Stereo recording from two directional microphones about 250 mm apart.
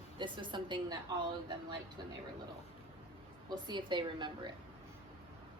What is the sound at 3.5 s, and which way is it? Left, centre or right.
Speech, centre.